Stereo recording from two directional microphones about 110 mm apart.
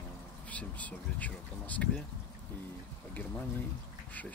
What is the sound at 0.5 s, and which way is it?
Speech, 15° left (ahead or behind).